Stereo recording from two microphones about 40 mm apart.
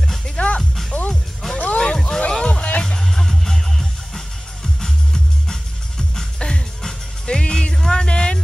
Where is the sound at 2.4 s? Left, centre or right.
Left.